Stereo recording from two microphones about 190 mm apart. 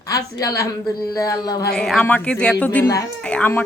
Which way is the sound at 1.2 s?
20° left (ahead or behind).